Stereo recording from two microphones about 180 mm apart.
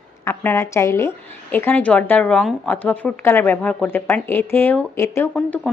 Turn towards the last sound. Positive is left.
turn(degrees=5)  # may be behind; listen again after turning